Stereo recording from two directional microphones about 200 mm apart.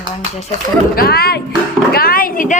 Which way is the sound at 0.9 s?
50° left (ahead or behind).